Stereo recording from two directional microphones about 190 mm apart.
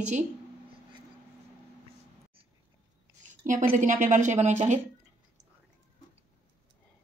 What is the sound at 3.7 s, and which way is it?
A woman's voice, 40° right (ahead or behind).